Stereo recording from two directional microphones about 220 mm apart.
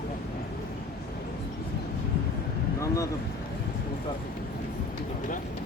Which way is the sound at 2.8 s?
15° left (ahead or behind).